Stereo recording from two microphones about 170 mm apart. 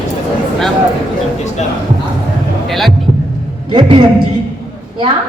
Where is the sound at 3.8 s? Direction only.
30° right (ahead or behind).